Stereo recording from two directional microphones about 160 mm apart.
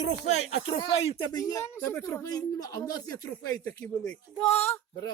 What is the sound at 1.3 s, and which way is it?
A child's voice, 20° left (ahead or behind).